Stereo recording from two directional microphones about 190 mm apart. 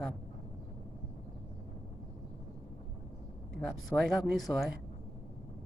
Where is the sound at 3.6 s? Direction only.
5° left (ahead or behind).